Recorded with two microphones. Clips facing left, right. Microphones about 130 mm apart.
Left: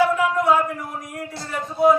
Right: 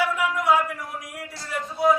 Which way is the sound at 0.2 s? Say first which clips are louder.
Left 4 dB; 15° left (ahead or behind).